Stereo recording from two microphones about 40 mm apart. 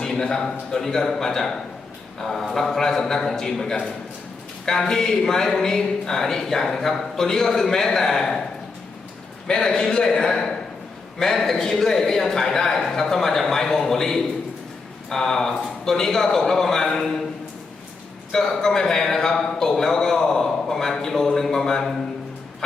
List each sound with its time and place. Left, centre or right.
0.0 s a sound: centre
0.8 s speech: centre
9.6 s a man's voice: centre
18.3 s speech: centre